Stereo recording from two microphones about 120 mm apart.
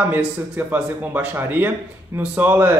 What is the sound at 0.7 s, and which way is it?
Speech, 15° right (ahead or behind).